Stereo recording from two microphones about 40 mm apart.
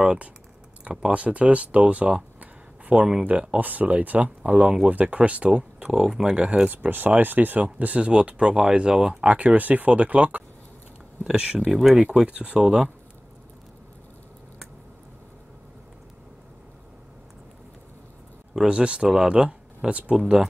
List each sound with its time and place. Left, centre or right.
1.1 s speech: right
2.9 s speech: centre
3.3 s speech: right
5.5 s speech: centre
6.3 s speech: right
6.7 s speech: right
9.6 s speech: right
11.3 s speech: right
11.9 s speech: centre
12.3 s speech: right
12.5 s speech: centre
18.7 s speech: right